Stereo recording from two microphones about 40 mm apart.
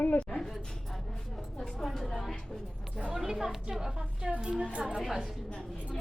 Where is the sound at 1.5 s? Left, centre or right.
Left.